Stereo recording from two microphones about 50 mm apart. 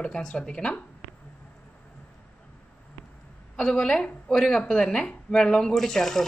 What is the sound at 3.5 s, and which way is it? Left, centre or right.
A woman's voice, centre.